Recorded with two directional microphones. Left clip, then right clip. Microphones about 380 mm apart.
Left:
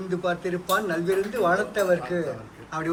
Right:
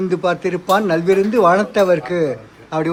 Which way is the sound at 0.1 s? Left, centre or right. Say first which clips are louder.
Right 4 dB; centre.